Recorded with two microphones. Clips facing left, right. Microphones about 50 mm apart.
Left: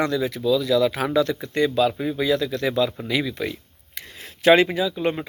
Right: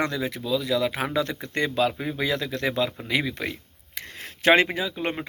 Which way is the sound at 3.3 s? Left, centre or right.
Right.